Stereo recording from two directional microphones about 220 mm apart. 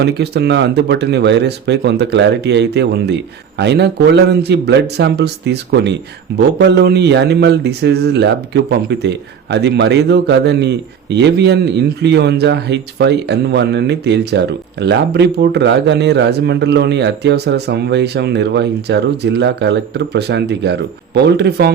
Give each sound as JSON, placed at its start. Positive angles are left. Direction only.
{"t": 0.0, "sound": "a man's voice", "side_deg": -50}